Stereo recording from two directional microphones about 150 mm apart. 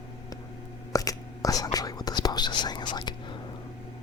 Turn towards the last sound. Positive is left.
turn(degrees=30)  # may be behind; listen again after turning